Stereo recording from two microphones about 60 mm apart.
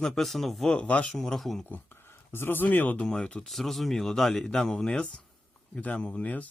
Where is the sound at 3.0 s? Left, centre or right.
Centre.